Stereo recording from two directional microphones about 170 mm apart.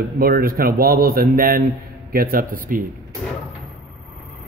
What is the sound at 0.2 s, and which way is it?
A man's voice, 60° right (ahead or behind).